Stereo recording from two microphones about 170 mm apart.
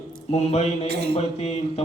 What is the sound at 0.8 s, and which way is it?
Mantra, 75° right (ahead or behind).